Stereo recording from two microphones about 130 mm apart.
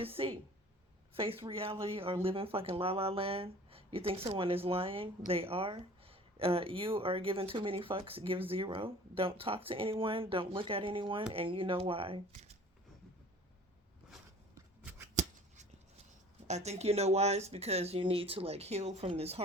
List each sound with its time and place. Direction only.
0.0 s speech: 45° right (ahead or behind)
15.1 s a sound: 65° right (ahead or behind)
16.5 s speech: 60° right (ahead or behind)